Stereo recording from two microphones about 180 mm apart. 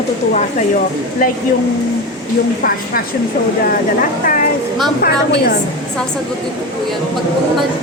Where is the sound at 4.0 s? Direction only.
45° left (ahead or behind).